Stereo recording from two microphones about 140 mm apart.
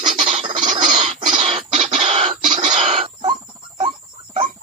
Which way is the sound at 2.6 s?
50° right (ahead or behind).